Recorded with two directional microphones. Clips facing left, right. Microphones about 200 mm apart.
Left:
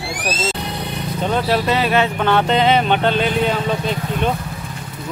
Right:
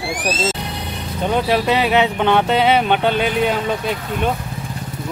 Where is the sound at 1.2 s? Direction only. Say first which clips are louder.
Right 1 dB; 15° right (ahead or behind).